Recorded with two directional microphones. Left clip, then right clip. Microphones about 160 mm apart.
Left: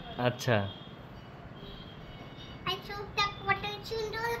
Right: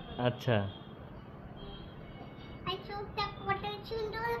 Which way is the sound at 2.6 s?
5° left (ahead or behind).